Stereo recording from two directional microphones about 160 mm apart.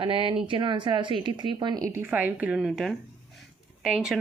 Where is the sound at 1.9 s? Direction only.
15° right (ahead or behind).